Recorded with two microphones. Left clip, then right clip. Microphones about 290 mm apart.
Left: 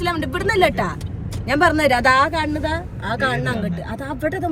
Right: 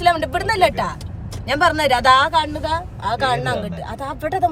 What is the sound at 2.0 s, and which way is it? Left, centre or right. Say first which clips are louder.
Speech: right 2 dB; right.